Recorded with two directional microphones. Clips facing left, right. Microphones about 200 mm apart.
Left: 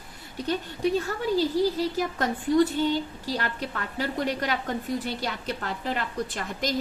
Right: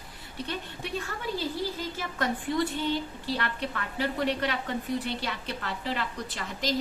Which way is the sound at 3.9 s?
45° left (ahead or behind).